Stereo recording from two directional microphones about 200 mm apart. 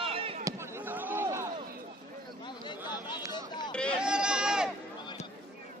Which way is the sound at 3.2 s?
15° right (ahead or behind).